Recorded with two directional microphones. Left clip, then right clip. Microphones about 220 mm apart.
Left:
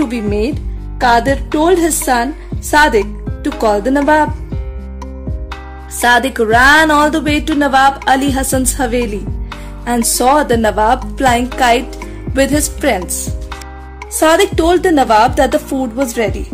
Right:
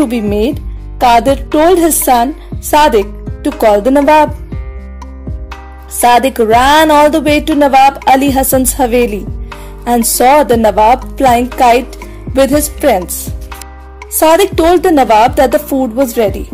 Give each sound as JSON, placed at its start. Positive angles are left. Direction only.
{"t": 0.1, "sound": "speech", "side_deg": -20}
{"t": 5.9, "sound": "a woman's voice", "side_deg": -15}
{"t": 14.1, "sound": "a woman's voice", "side_deg": -15}